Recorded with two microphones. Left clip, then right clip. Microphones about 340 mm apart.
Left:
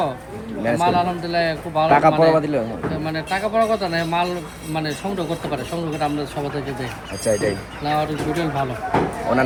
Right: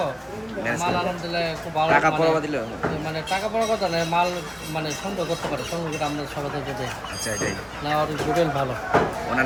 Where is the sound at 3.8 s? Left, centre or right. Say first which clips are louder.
Left 1 dB; centre.